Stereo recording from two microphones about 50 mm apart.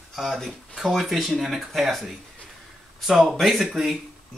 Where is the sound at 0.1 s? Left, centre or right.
Centre.